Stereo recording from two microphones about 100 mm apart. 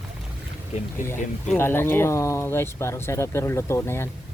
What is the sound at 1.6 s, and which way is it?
Speech, 20° left (ahead or behind).